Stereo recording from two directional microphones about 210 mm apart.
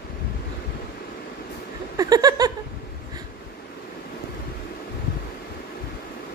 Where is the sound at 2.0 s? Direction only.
20° right (ahead or behind).